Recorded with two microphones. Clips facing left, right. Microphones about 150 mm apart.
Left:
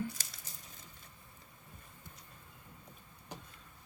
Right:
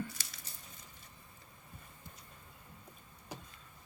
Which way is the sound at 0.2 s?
45° left (ahead or behind).